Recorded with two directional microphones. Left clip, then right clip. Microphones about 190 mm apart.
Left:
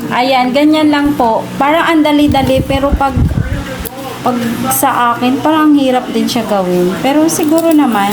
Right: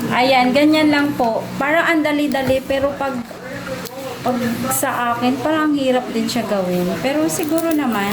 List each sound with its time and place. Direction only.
0.1 s a woman's voice: 20° left (ahead or behind)
4.8 s a woman's voice: 15° left (ahead or behind)
7.5 s a woman's voice: 20° left (ahead or behind)